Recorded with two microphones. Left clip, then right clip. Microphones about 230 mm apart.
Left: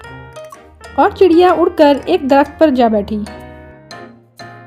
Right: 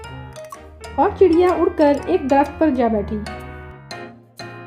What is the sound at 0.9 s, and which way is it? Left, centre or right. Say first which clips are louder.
A woman's voice: left 5 dB; left.